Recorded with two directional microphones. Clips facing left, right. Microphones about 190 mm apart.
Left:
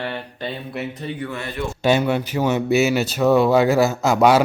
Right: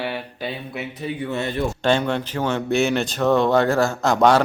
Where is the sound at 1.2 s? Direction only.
25° right (ahead or behind).